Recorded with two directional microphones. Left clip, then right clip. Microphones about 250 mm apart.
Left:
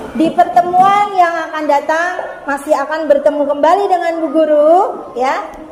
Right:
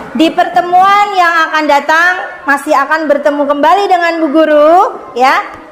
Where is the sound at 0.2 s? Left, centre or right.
Right.